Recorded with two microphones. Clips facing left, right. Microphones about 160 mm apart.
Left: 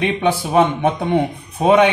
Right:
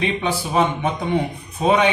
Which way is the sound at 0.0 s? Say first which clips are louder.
Left 4 dB; 60° left (ahead or behind).